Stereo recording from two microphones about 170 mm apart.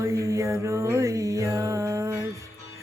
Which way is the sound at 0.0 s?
20° right (ahead or behind).